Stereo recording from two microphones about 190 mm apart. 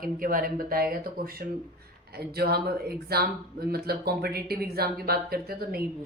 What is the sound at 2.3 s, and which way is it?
Speech, 55° right (ahead or behind).